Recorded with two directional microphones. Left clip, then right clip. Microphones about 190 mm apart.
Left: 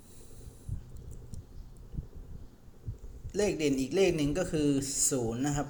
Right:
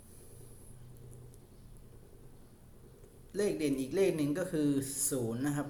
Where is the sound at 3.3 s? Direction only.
25° left (ahead or behind).